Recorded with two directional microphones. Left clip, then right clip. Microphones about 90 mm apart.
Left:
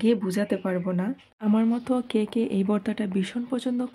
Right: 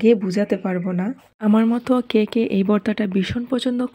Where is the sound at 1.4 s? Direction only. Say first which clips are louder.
Right 6 dB; 60° right (ahead or behind).